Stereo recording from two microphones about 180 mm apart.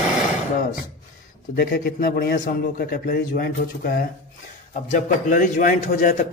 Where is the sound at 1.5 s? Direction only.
55° left (ahead or behind).